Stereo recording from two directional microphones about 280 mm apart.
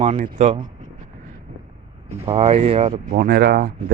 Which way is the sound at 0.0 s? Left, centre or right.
Right.